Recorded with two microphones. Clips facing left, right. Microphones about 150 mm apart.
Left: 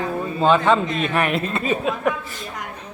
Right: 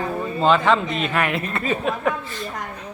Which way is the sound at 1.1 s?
25° left (ahead or behind).